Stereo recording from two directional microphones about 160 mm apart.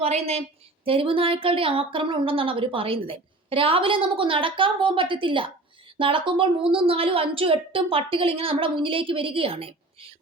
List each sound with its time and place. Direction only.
0.0 s speech: 40° right (ahead or behind)